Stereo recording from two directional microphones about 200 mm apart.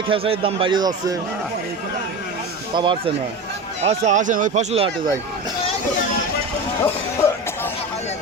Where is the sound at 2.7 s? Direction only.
25° right (ahead or behind).